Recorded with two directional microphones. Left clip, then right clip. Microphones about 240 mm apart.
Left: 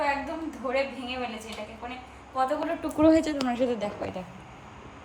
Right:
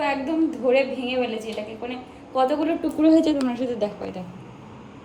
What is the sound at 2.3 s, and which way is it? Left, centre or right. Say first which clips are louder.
Speech: right 6 dB; centre.